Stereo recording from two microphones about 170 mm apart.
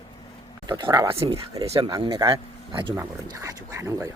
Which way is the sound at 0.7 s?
25° right (ahead or behind).